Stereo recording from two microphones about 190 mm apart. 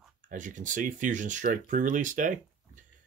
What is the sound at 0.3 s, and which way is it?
Speech, 40° right (ahead or behind).